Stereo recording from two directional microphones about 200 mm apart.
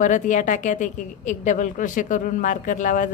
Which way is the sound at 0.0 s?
40° left (ahead or behind).